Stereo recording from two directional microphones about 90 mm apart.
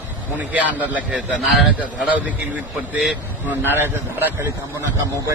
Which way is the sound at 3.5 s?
25° right (ahead or behind).